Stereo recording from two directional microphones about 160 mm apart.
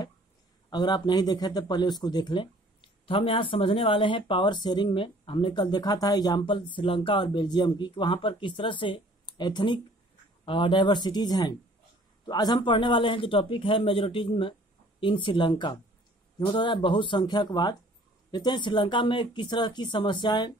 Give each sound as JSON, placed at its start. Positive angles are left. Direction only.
{"t": 0.7, "sound": "speech", "side_deg": 25}